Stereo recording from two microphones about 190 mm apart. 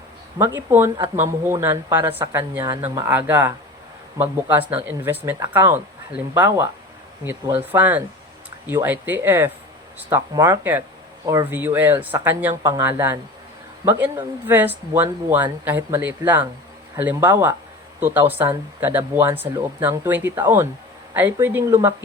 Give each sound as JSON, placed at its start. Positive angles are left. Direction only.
{"t": 0.3, "sound": "speech", "side_deg": -10}